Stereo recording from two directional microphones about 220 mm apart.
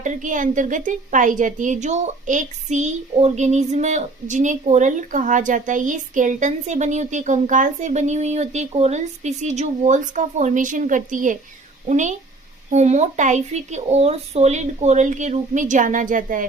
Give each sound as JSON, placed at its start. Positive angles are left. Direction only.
{"t": 0.0, "sound": "a woman's voice", "side_deg": -35}